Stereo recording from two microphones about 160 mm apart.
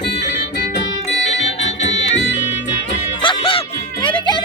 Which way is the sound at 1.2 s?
45° left (ahead or behind).